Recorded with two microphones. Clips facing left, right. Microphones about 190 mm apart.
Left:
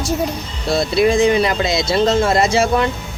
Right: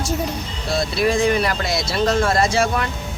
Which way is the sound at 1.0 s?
20° left (ahead or behind).